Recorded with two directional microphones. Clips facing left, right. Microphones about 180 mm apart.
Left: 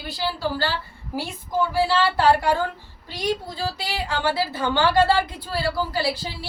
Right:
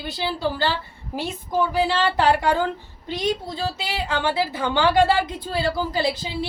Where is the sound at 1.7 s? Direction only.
20° right (ahead or behind).